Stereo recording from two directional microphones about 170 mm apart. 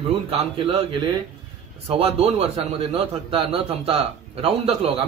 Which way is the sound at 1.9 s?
35° right (ahead or behind).